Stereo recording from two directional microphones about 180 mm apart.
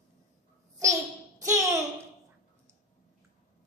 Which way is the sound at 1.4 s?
15° right (ahead or behind).